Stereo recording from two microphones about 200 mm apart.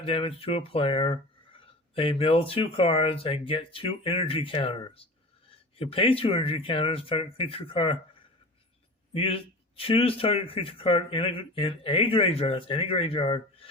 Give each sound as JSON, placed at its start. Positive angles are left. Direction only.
{"t": 0.0, "sound": "speech", "side_deg": 30}
{"t": 9.1, "sound": "speech", "side_deg": 30}